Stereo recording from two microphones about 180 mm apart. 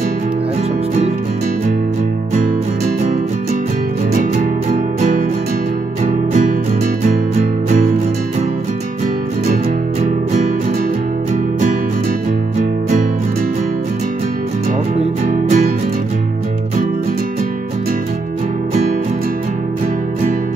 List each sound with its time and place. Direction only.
4.1 s music: 50° right (ahead or behind)
6.0 s music: 50° right (ahead or behind)
15.0 s music: 45° right (ahead or behind)